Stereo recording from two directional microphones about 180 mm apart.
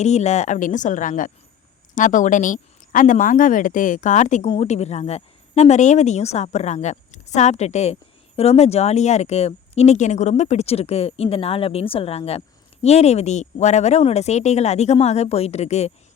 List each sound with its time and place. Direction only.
0.0 s speech: 40° left (ahead or behind)